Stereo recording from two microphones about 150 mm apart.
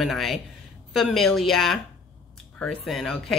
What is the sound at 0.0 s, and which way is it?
Speech, centre (ahead or behind).